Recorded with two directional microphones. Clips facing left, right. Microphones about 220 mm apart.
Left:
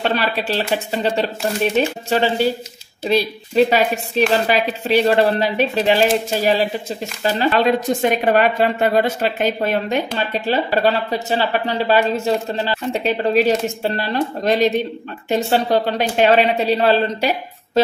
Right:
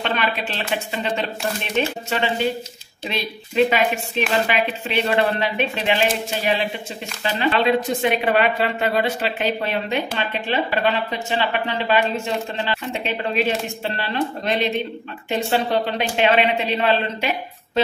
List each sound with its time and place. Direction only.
0.0 s a woman's voice: 35° left (ahead or behind)